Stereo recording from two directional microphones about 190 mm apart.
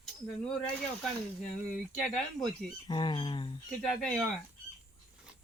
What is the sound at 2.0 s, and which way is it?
Speech, centre (ahead or behind).